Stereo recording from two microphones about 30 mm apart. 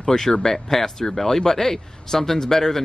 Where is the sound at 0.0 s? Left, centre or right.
Centre.